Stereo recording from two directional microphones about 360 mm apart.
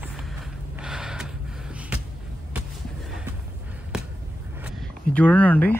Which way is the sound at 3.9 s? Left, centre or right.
Centre.